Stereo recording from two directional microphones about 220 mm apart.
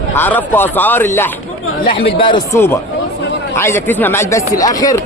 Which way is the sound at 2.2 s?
20° left (ahead or behind).